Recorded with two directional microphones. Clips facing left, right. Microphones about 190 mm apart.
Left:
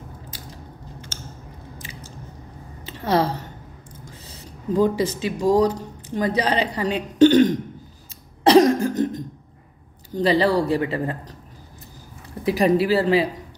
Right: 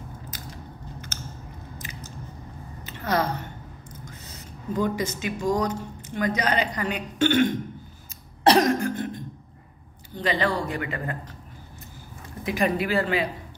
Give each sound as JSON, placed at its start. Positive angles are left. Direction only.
{"t": 1.1, "sound": "chewing", "side_deg": 30}
{"t": 1.8, "sound": "biting", "side_deg": 30}
{"t": 2.8, "sound": "a sound", "side_deg": 30}
{"t": 4.0, "sound": "speech", "side_deg": 30}
{"t": 8.5, "sound": "cough", "side_deg": 30}
{"t": 10.1, "sound": "speech", "side_deg": 35}
{"t": 12.4, "sound": "speech", "side_deg": 35}